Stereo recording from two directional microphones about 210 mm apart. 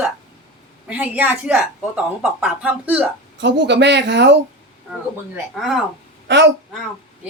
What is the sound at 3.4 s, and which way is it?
Speech, 55° right (ahead or behind).